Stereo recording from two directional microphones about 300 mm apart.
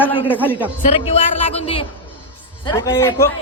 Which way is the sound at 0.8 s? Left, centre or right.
Left.